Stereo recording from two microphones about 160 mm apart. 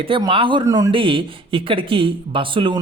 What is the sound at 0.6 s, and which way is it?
Speech, 20° right (ahead or behind).